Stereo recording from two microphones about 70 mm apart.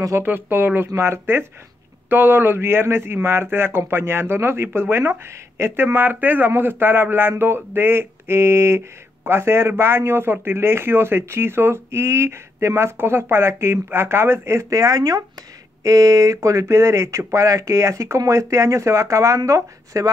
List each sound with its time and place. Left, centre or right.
0.2 s speech: right